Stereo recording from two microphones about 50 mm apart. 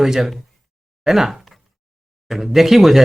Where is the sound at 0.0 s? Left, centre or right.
Centre.